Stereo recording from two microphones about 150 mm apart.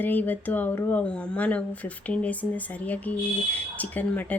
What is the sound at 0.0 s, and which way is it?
Speech, 10° left (ahead or behind).